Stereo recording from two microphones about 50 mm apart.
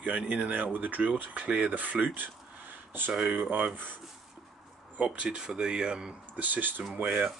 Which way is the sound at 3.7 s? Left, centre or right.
Right.